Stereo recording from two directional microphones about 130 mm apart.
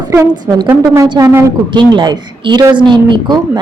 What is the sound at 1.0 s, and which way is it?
Speech, 35° right (ahead or behind).